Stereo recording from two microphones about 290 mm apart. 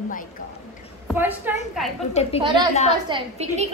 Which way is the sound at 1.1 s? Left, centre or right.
Centre.